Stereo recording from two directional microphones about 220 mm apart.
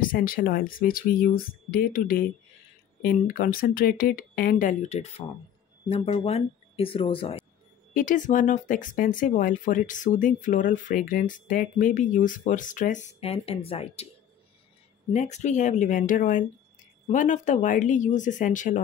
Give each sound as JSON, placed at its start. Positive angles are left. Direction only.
{"t": 0.0, "sound": "speech", "side_deg": 40}
{"t": 7.9, "sound": "speech", "side_deg": 35}
{"t": 15.1, "sound": "speech", "side_deg": 30}